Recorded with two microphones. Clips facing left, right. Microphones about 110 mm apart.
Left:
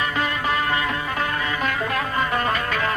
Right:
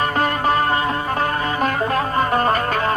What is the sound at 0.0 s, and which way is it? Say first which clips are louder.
Music: right 5 dB; 45° right (ahead or behind).